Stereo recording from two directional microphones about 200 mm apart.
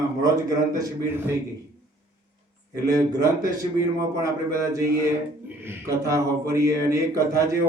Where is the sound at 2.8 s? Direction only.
15° right (ahead or behind).